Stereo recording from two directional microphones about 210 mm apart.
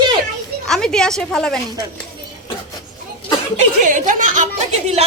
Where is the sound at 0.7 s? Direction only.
5° left (ahead or behind).